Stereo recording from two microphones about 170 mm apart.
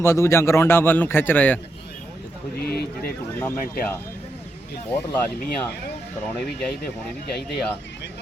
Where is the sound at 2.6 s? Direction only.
65° left (ahead or behind).